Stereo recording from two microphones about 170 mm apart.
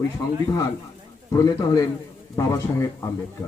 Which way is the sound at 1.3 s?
20° left (ahead or behind).